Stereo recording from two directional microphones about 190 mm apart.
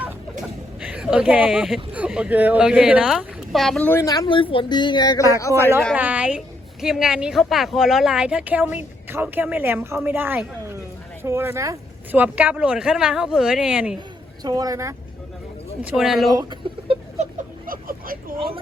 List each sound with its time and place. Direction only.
0.4 s a man's voice: 5° right (ahead or behind); by 5.7 s 15° left (ahead or behind)
6.0 s speech: 5° right (ahead or behind)
14.4 s speech: 20° right (ahead or behind)
15.8 s speech: 5° right (ahead or behind)
16.3 s chicken: 25° right (ahead or behind)
17.7 s vehicle: 50° right (ahead or behind)